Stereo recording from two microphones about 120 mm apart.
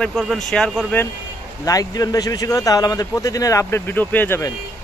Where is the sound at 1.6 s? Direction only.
30° left (ahead or behind).